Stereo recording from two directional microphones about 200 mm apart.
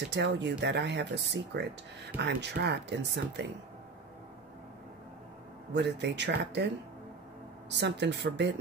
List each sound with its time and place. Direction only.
0.1 s speech: 60° right (ahead or behind)
5.7 s speech: 60° right (ahead or behind)
7.7 s speech: 60° right (ahead or behind)